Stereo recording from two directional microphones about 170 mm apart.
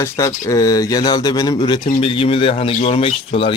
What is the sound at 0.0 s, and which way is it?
A man's voice, 15° left (ahead or behind).